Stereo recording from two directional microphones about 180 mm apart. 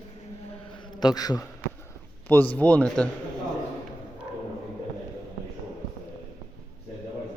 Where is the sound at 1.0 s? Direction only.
20° left (ahead or behind).